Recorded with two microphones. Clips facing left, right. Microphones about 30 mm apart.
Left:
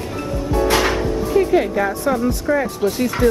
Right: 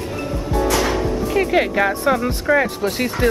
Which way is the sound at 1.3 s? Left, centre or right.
Right.